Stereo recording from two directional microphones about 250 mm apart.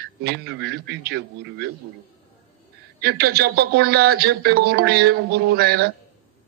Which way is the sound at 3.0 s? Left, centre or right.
Right.